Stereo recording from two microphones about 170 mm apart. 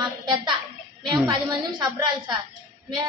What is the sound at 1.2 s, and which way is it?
Speech, 25° right (ahead or behind).